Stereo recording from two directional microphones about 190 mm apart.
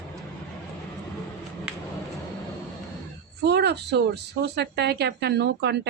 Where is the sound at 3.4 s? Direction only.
60° right (ahead or behind).